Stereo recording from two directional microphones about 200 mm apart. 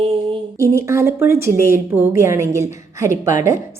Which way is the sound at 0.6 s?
15° right (ahead or behind).